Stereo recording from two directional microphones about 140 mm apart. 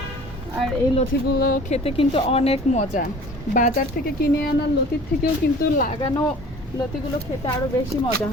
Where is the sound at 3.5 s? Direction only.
80° left.